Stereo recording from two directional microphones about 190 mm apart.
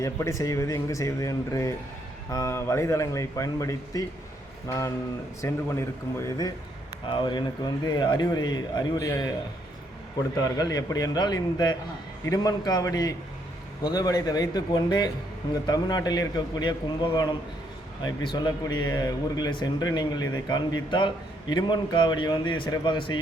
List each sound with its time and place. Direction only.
0.0 s speech: 15° left (ahead or behind)
5.4 s a man's voice: 15° left (ahead or behind)
10.4 s a man's voice: 20° left (ahead or behind)